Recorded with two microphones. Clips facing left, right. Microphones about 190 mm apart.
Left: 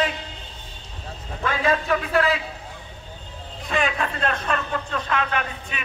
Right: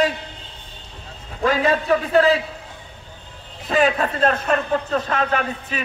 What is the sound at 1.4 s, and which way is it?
Speech, 35° right (ahead or behind).